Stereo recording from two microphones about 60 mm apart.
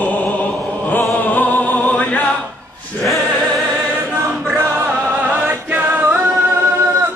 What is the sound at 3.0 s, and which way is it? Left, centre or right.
Music, centre.